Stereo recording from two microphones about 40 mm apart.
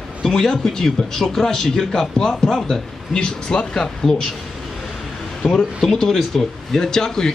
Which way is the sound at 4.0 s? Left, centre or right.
Centre.